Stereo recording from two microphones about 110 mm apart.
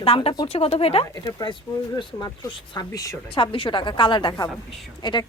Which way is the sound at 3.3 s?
55° left (ahead or behind).